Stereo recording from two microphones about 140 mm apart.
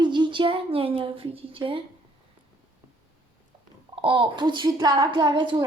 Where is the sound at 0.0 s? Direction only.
35° right (ahead or behind).